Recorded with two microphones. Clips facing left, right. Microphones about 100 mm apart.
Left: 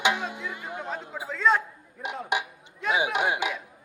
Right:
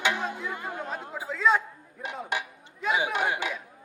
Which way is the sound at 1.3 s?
Centre (ahead or behind).